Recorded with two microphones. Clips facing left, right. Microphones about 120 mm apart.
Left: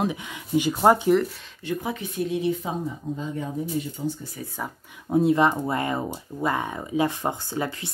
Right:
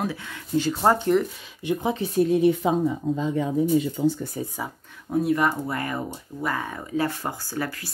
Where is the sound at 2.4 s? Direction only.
70° right (ahead or behind); by 4.1 s 90° right.